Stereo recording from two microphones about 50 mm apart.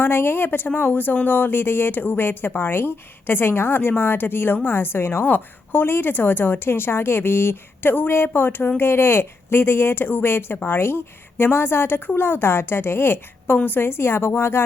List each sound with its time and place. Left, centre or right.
0.0 s speech: left